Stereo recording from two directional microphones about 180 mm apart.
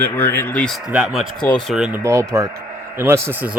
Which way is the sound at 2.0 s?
15° right (ahead or behind).